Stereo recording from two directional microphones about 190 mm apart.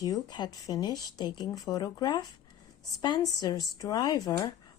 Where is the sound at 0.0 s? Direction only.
20° left (ahead or behind).